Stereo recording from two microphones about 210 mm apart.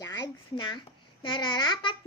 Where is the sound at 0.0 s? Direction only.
15° left (ahead or behind).